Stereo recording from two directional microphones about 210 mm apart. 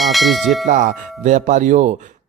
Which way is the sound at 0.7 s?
35° right (ahead or behind).